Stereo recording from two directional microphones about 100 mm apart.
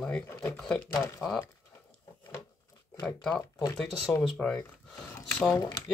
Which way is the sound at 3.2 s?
10° left (ahead or behind).